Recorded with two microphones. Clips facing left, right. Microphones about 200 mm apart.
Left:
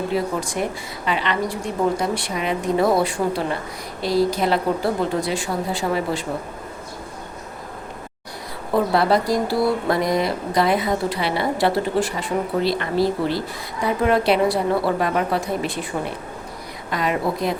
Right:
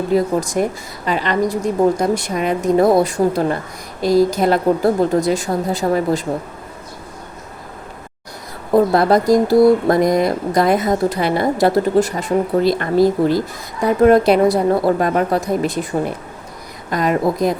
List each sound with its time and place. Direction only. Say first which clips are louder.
0.1 s a woman's voice: right 7 dB; 40° right (ahead or behind)
8.7 s speech: right 5 dB; 45° right (ahead or behind)